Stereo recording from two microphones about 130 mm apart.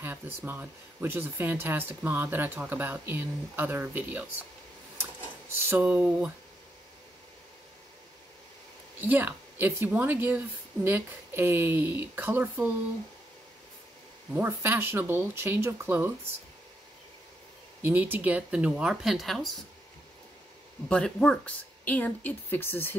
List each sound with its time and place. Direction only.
0.0 s speech: 15° right (ahead or behind)
5.5 s speech: 15° right (ahead or behind)
9.0 s speech: 15° right (ahead or behind)
14.3 s speech: 15° right (ahead or behind)
17.8 s speech: 15° right (ahead or behind)
20.9 s speech: 5° left (ahead or behind)